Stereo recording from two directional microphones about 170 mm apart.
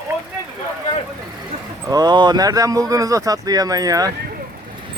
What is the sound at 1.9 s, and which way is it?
Speech, 25° right (ahead or behind).